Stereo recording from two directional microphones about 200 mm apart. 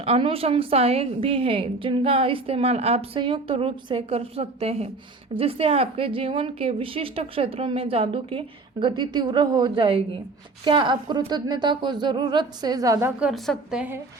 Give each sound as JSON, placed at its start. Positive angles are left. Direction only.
{"t": 0.0, "sound": "a woman's voice", "side_deg": -30}